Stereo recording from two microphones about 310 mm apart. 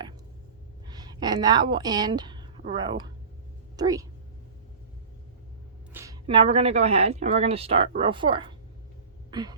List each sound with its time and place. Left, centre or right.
0.9 s a woman's voice: centre
5.9 s speech: centre
9.3 s a sound: centre